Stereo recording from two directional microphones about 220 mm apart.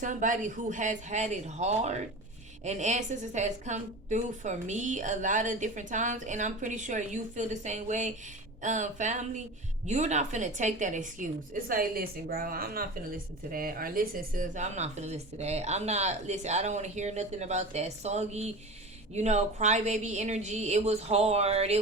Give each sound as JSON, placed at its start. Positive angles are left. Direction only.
{"t": 0.0, "sound": "a woman's voice", "side_deg": -35}